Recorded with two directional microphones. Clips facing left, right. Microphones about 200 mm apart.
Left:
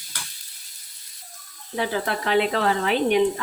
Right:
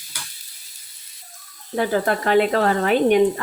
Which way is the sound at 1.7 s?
45° right (ahead or behind).